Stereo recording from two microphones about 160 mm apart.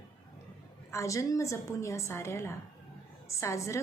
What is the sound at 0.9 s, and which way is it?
A woman's voice, 20° left (ahead or behind).